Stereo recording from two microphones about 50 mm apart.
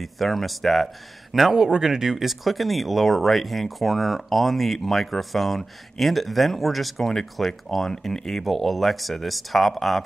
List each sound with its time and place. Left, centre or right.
0.0 s speech: centre
1.5 s speech: centre